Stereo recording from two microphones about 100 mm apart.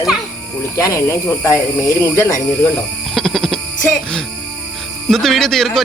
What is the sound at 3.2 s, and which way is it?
Music, centre (ahead or behind).